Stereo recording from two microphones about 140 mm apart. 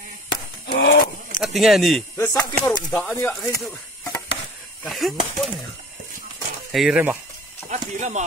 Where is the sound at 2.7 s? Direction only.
10° left (ahead or behind).